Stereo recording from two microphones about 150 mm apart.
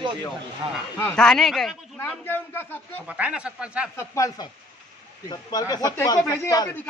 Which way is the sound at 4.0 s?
20° left (ahead or behind).